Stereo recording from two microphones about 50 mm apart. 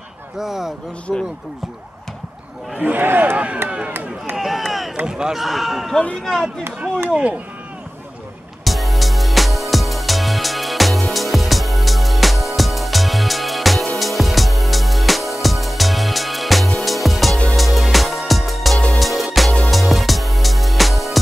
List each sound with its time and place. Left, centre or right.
0.4 s speech: centre
1.1 s speech: centre
2.8 s a man's voice: right
3.6 s chop: right
4.4 s a sound: centre
5.0 s speech: centre
7.1 s speech: right
8.6 s music: centre